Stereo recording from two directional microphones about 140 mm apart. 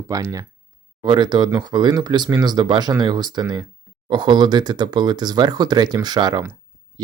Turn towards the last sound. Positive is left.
turn(degrees=-30)  # may be behind; listen again after turning